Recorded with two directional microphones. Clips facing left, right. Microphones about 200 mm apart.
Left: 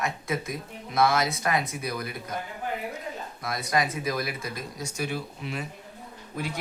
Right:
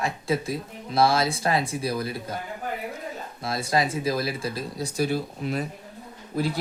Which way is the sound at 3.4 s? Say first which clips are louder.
Right 3 dB; 30° right (ahead or behind).